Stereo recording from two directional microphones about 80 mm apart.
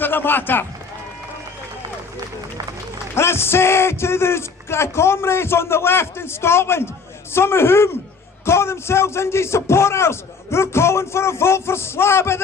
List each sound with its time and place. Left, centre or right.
0.0 s a man's voice: left
3.2 s a man's voice: left